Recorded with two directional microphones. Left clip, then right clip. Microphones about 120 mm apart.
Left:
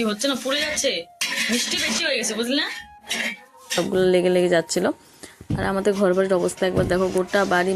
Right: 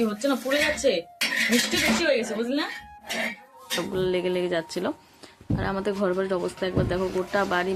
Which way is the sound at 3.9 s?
45° left (ahead or behind).